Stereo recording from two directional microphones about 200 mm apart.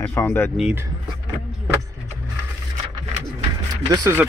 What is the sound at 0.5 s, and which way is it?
Speech, 5° right (ahead or behind).